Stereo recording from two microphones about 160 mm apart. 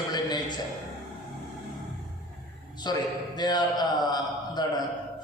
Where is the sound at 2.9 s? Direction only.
25° left (ahead or behind).